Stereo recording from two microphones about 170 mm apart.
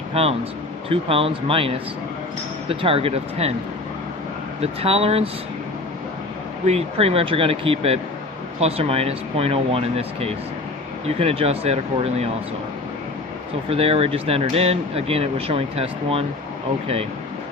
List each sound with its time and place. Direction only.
0.1 s speech: 35° right (ahead or behind)
4.6 s speech: 35° right (ahead or behind)
6.7 s speech: 35° right (ahead or behind)
13.7 s speech: 35° right (ahead or behind)